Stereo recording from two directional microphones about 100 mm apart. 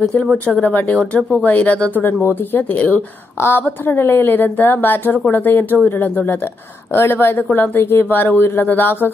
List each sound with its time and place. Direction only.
0.6 s a woman's voice: 15° left (ahead or behind)